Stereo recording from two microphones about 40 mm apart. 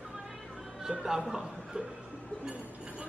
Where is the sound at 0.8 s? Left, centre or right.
Centre.